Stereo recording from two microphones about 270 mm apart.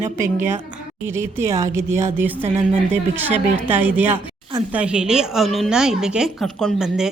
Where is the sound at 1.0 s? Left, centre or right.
Centre.